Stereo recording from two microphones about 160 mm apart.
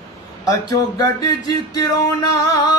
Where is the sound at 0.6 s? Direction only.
25° left (ahead or behind).